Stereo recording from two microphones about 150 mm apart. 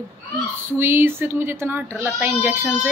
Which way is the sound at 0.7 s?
15° right (ahead or behind).